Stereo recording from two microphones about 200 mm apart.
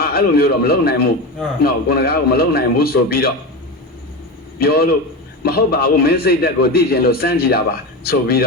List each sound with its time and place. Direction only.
0.0 s a man's voice: 50° left (ahead or behind)
4.6 s a man's voice: 50° left (ahead or behind)